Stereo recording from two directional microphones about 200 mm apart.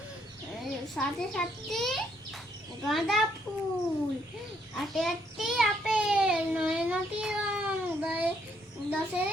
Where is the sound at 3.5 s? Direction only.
Centre (ahead or behind).